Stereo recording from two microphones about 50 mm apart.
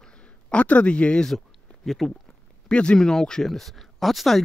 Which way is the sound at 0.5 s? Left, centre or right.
Left.